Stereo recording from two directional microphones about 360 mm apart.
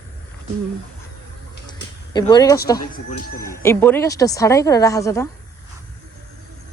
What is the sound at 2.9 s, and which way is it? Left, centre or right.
Speech, left.